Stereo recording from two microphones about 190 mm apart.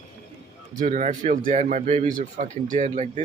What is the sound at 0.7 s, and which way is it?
Speech, 40° right (ahead or behind).